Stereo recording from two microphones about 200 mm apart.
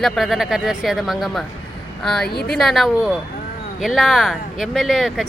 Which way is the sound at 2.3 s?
50° left (ahead or behind).